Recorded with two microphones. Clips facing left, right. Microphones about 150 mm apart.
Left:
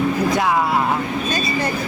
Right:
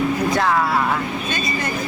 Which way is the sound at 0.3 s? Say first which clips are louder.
Right 1 dB; 15° left (ahead or behind).